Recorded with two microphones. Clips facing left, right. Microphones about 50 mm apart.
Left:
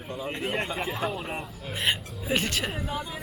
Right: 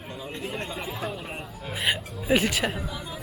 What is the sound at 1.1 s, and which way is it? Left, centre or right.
A woman's voice, centre.